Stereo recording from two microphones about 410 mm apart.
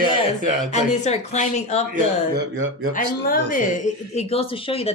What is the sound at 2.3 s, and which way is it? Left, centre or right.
Speech, right.